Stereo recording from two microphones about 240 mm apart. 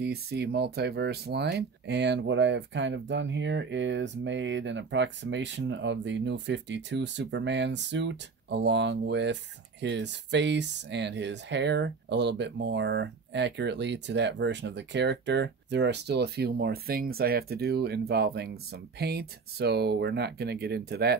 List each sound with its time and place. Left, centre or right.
0.0 s speech: right